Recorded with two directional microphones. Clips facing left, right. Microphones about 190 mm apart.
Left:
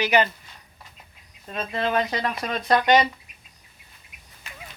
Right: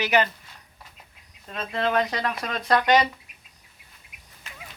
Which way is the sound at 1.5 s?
5° left (ahead or behind).